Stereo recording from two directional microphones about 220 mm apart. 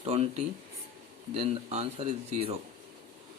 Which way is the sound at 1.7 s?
25° right (ahead or behind).